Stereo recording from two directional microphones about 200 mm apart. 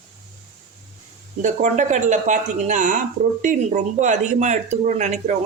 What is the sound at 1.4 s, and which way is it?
Speech, 35° right (ahead or behind).